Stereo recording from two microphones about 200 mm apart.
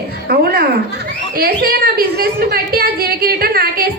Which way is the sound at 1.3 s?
50° right (ahead or behind).